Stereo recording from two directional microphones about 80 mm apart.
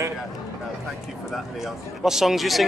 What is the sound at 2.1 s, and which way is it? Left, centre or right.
Speech, centre.